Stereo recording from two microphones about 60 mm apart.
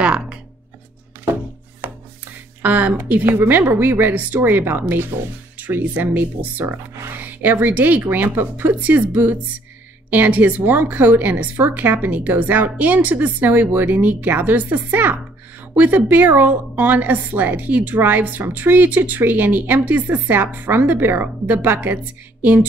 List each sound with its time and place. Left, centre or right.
0.0 s music: centre
2.6 s a woman's voice: right